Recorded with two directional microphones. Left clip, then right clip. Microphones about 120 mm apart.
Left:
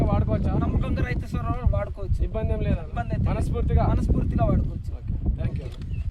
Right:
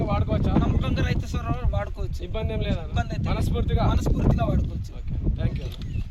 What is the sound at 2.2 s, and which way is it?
Speech, centre (ahead or behind).